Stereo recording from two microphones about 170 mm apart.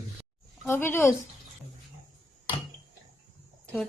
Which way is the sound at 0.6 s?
15° left (ahead or behind).